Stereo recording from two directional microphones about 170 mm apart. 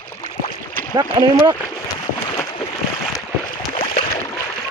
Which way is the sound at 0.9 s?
25° right (ahead or behind).